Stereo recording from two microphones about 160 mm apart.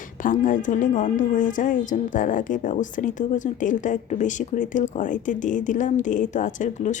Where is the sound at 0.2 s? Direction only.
55° left (ahead or behind).